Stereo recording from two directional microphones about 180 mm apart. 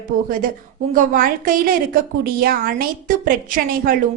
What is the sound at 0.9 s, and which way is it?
A woman's voice, 50° right (ahead or behind).